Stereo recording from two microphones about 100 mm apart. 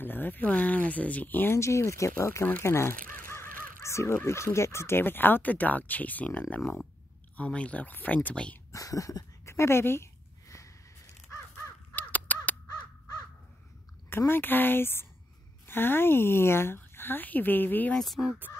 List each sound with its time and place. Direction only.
0.0 s speech: 20° left (ahead or behind)
8.7 s speech: 35° left (ahead or behind)
11.9 s crow: 15° left (ahead or behind)
14.1 s speech: 20° left (ahead or behind)
17.9 s speech: centre (ahead or behind)